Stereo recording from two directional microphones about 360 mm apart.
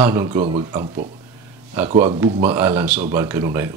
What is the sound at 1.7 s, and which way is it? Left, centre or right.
Speech, centre.